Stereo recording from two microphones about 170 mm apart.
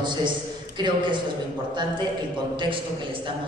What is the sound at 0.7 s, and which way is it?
Speech, 25° right (ahead or behind).